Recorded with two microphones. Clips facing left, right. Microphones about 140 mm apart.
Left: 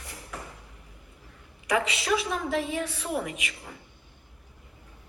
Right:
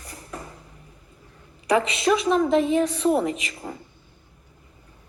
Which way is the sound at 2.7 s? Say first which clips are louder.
Right 10 dB; 25° right (ahead or behind).